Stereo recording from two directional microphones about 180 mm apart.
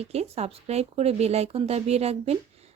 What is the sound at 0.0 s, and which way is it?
Speech, 35° right (ahead or behind).